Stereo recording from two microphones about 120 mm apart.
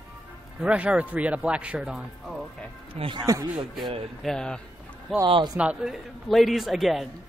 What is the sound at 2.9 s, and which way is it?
Speech, 45° right (ahead or behind).